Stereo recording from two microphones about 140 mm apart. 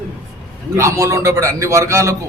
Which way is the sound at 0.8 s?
20° right (ahead or behind).